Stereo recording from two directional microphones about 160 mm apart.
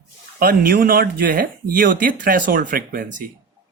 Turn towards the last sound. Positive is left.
turn(degrees=-60)  # may be behind; listen again after turning